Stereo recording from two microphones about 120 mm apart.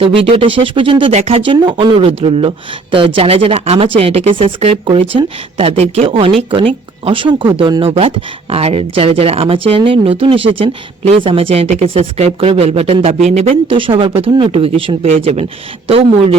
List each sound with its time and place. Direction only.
0.0 s speech: 50° right (ahead or behind)
1.1 s speech: 60° right (ahead or behind)